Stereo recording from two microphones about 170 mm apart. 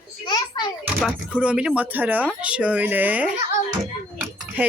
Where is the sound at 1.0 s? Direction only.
10° right (ahead or behind).